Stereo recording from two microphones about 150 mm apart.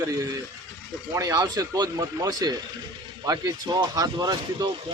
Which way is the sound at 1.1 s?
25° right (ahead or behind).